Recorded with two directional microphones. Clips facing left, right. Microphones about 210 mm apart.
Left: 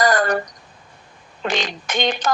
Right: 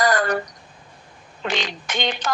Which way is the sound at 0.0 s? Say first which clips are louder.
Left 2 dB; 45° left (ahead or behind).